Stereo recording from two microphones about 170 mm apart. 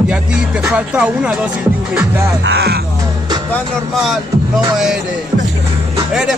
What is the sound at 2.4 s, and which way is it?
Speech, 70° right (ahead or behind).